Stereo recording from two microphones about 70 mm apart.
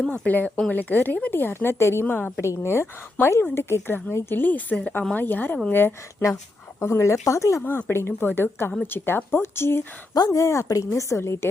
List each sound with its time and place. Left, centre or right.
0.1 s a woman's voice: left
2.4 s a woman's voice: left
6.2 s speech: left
7.6 s speech: left
10.2 s speech: left